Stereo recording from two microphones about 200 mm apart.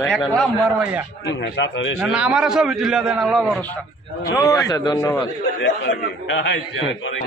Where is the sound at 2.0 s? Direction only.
5° right (ahead or behind).